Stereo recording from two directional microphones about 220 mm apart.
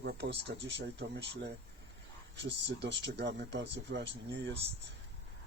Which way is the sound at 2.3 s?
50° right (ahead or behind).